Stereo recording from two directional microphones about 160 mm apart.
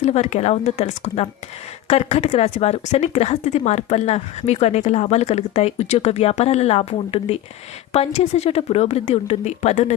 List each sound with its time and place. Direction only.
0.0 s speech: 45° left (ahead or behind)